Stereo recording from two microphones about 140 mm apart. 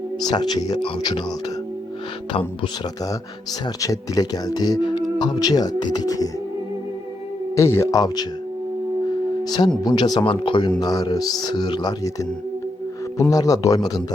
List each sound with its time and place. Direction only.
0.2 s speech: 30° left (ahead or behind)
3.8 s speech: 25° left (ahead or behind)
7.5 s speech: 20° left (ahead or behind)
9.4 s speech: 30° left (ahead or behind)
13.1 s speech: 25° left (ahead or behind)